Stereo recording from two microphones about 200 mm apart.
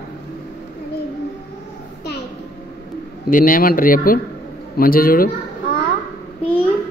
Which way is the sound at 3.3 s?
45° left (ahead or behind).